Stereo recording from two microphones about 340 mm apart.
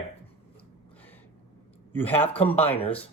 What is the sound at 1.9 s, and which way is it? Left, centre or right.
Speech, centre.